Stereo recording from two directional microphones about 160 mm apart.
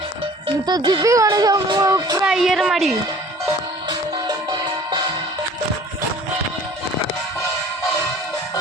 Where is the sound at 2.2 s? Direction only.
5° right (ahead or behind).